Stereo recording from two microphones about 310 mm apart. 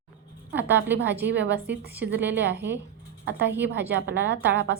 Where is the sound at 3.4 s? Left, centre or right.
Right.